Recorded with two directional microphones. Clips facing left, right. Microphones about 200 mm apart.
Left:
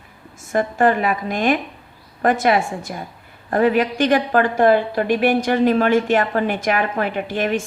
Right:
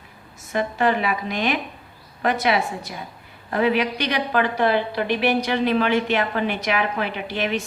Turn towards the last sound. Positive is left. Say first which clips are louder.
# left 4 dB
turn(degrees=50)  # may be behind; listen again after turning